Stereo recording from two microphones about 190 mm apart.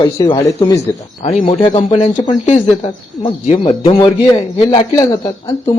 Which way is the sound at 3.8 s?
30° left (ahead or behind).